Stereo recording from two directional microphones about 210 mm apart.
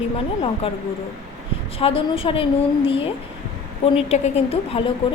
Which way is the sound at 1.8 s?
25° left (ahead or behind).